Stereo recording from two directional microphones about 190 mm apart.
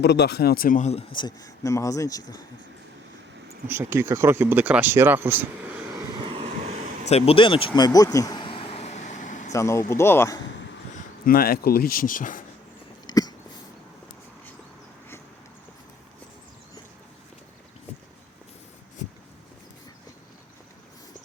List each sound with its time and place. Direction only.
0.0 s speech: 60° left (ahead or behind); by 2.2 s 20° left (ahead or behind)
3.7 s speech: 10° right (ahead or behind)
6.1 s vehicle: 30° right (ahead or behind)
7.1 s a sound: 30° left (ahead or behind)
9.5 s speech: 15° left (ahead or behind)
11.3 s speech: 50° left (ahead or behind)
13.1 s a sound: 20° left (ahead or behind)